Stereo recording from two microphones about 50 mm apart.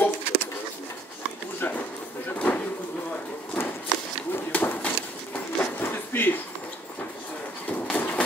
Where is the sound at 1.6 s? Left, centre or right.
Left.